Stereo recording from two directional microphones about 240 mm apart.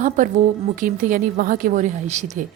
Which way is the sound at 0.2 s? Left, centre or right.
Right.